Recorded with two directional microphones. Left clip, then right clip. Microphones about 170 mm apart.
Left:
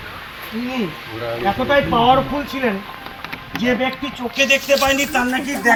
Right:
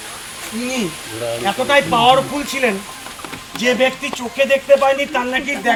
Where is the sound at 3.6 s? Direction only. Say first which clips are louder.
Right 4 dB; 35° right (ahead or behind).